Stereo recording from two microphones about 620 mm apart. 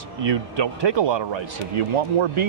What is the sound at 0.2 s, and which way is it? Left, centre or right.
A man's voice, right.